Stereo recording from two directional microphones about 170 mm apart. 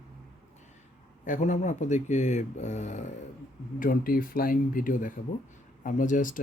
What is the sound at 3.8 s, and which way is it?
Speech, 55° left (ahead or behind).